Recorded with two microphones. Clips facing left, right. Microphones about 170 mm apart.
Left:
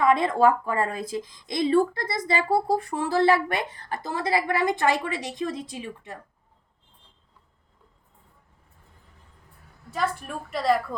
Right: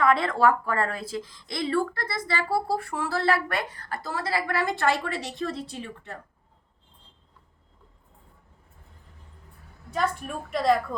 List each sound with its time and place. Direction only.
0.0 s a woman's voice: 20° left (ahead or behind)
9.9 s a woman's voice: centre (ahead or behind)